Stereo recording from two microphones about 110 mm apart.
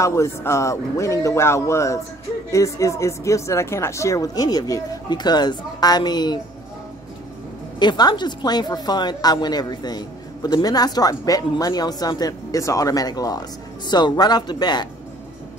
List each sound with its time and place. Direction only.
0.0 s a man's voice: 25° left (ahead or behind)
7.8 s a woman's voice: 40° left (ahead or behind)